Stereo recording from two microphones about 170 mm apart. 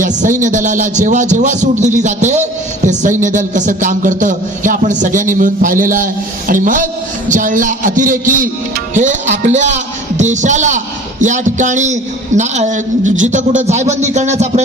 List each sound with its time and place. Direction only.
0.0 s a man's voice: 50° right (ahead or behind)